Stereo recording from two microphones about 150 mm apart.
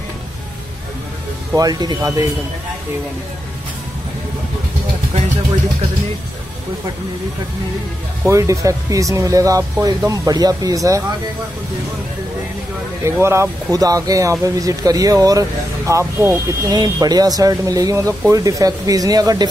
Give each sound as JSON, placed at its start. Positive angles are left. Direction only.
{"t": 1.5, "sound": "speech", "side_deg": -25}
{"t": 8.3, "sound": "speech", "side_deg": -20}
{"t": 13.0, "sound": "speech", "side_deg": -20}